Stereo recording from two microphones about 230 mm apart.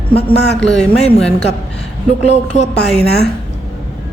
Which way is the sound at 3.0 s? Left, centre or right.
Left.